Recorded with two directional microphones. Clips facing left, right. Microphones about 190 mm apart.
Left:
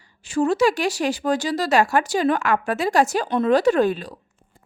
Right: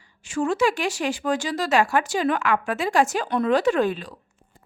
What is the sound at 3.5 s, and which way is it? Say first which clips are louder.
Speech: left 3 dB; 40° left (ahead or behind).